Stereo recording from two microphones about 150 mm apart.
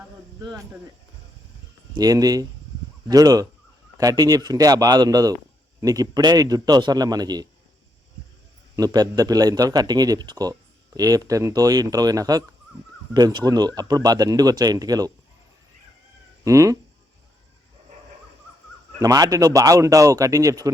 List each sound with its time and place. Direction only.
0.3 s speech: 25° right (ahead or behind)
2.0 s a man's voice: 25° right (ahead or behind)
8.7 s a man's voice: 25° right (ahead or behind)
16.4 s a man's voice: 20° right (ahead or behind)
18.9 s a man's voice: 20° right (ahead or behind)